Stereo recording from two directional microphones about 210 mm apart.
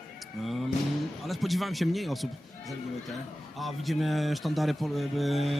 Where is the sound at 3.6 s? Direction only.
Centre (ahead or behind).